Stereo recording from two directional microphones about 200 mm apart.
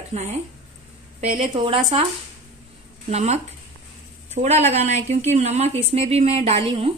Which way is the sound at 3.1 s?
35° right (ahead or behind).